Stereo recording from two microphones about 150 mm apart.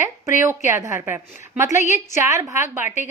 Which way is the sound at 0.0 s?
15° right (ahead or behind).